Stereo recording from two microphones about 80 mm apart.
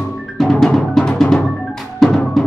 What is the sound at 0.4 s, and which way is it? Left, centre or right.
Music, centre.